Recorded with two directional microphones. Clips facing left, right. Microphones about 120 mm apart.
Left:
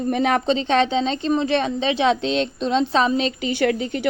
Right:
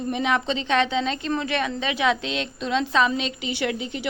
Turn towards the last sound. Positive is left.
turn(degrees=50)  # may be behind; listen again after turning